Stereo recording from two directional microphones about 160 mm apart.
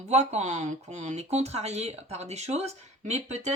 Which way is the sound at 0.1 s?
45° right (ahead or behind).